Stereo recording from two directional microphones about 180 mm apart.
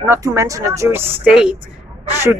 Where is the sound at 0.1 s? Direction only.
15° right (ahead or behind).